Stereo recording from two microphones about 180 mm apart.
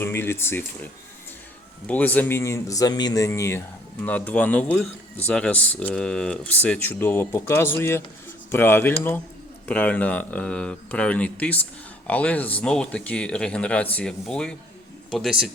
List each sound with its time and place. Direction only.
0.0 s a man's voice: 15° left (ahead or behind)
1.9 s a man's voice: 10° left (ahead or behind)